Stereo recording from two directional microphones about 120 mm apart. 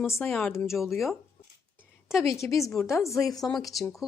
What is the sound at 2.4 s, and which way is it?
A woman's voice, 25° left (ahead or behind).